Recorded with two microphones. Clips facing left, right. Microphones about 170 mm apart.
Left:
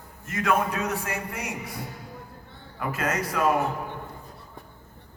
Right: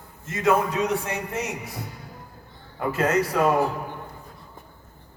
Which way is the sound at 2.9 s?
25° right (ahead or behind).